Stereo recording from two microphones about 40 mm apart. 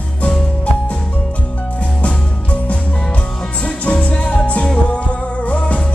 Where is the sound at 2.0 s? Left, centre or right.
Left.